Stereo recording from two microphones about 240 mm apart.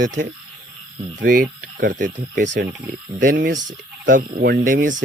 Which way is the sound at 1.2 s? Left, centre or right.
Right.